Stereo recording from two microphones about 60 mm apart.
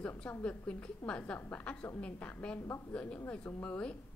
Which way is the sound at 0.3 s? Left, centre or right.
Left.